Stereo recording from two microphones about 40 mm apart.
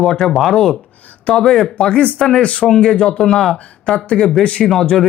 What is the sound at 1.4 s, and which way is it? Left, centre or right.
Speech, centre.